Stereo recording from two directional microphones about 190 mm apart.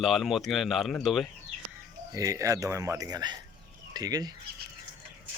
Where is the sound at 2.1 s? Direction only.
15° right (ahead or behind).